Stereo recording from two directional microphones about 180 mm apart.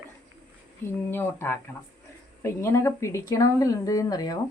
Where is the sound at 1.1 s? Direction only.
10° left (ahead or behind).